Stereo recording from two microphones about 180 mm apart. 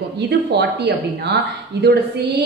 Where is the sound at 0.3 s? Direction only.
65° right (ahead or behind).